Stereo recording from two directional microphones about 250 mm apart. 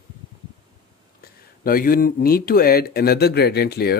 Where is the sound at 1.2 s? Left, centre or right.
Left.